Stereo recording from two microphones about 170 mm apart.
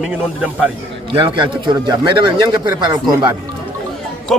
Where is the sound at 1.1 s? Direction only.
30° right (ahead or behind).